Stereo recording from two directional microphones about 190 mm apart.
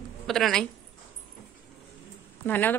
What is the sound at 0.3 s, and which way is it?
Speech, centre (ahead or behind).